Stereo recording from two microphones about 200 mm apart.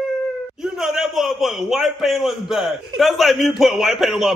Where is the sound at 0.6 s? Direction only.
Centre (ahead or behind).